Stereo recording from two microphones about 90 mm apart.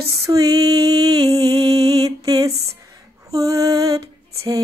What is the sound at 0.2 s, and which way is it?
Female singing, 40° right (ahead or behind).